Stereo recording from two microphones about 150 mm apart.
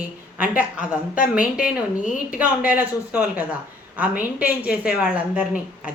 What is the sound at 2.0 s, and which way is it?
Speech, 60° left (ahead or behind).